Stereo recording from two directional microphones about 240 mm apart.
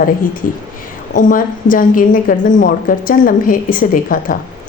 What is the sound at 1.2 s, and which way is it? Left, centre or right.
A woman's voice, left.